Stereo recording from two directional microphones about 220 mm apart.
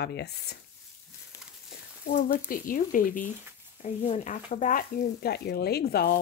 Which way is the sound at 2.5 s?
40° left (ahead or behind).